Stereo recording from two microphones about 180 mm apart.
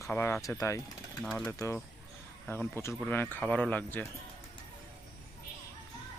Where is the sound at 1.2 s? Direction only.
5° left (ahead or behind).